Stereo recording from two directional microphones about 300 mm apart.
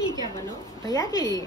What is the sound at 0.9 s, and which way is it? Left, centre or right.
Speech, centre.